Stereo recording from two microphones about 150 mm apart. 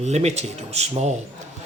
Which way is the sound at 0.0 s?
45° right (ahead or behind).